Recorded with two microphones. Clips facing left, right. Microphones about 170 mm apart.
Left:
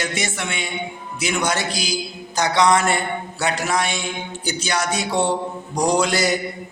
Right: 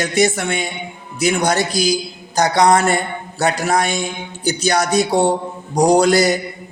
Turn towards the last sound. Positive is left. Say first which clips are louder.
# right 6 dB
turn(degrees=-40)  # may be behind; listen again after turning